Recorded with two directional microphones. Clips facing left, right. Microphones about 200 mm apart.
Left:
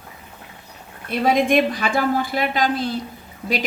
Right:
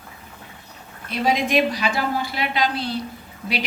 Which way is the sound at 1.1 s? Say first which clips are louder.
Left 3 dB; 50° left (ahead or behind).